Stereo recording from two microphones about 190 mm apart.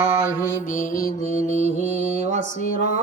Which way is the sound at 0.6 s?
45° left (ahead or behind).